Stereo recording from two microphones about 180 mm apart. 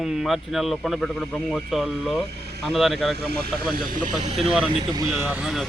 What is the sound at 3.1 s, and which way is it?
Speech, 60° right (ahead or behind).